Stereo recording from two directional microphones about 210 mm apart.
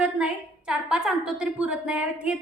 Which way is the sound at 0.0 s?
5° right (ahead or behind).